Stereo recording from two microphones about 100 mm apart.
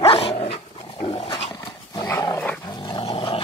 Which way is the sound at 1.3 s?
55° left (ahead or behind).